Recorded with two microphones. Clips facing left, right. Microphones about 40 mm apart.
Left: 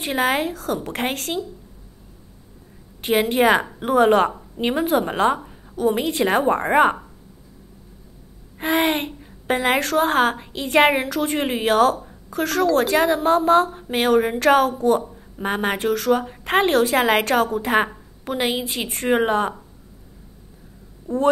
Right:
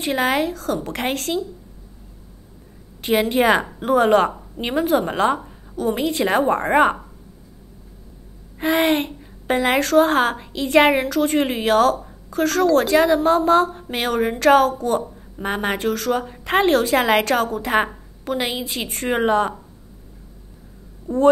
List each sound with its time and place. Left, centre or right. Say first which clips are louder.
0.0 s a woman's voice: right 1 dB; centre
3.0 s a woman's voice: even; centre
5.9 s a woman's voice: even; centre
6.2 s a woman's voice: even; centre
8.7 s a woman's voice: right 1 dB; centre
11.1 s a woman's voice: right 3 dB; centre